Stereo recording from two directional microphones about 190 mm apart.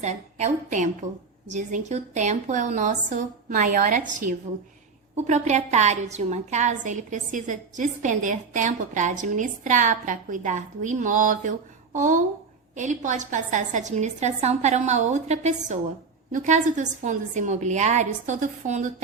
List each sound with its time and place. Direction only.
0.0 s a woman's voice: 35° right (ahead or behind)